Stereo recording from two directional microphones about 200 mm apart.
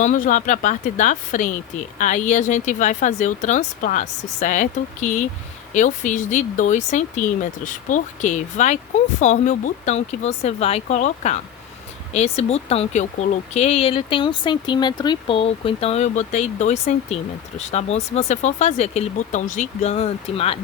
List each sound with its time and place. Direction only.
0.0 s speech: 40° left (ahead or behind)